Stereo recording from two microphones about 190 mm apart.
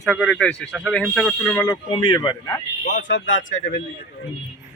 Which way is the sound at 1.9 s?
25° left (ahead or behind).